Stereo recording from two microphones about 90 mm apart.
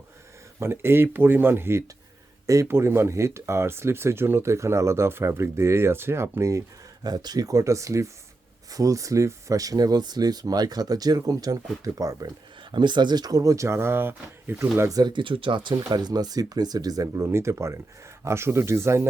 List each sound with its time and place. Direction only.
0.6 s speech: 25° right (ahead or behind)
7.0 s speech: 50° right (ahead or behind)
12.7 s speech: 60° right (ahead or behind); by 14.9 s 30° right (ahead or behind)
14.9 s speech: 55° right (ahead or behind)
17.2 s speech: 30° right (ahead or behind)